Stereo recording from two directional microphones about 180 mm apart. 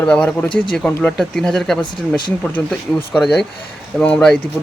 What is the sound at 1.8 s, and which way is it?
Speech, 25° left (ahead or behind).